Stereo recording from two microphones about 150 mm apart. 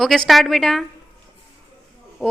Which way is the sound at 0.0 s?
Centre (ahead or behind).